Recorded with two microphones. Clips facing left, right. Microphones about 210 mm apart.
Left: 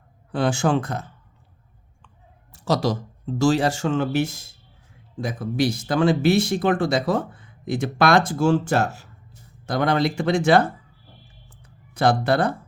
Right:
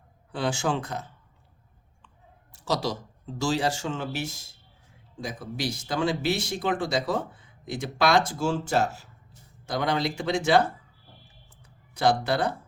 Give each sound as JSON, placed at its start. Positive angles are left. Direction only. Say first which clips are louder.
{"t": 0.3, "sound": "speech", "louder": "left 6 dB", "side_deg": 50}
{"t": 2.5, "sound": "speech", "louder": "left 6 dB", "side_deg": 55}
{"t": 11.9, "sound": "speech", "louder": "left 4 dB", "side_deg": 55}